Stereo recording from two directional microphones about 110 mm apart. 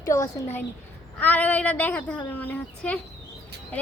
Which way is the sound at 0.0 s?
30° left (ahead or behind).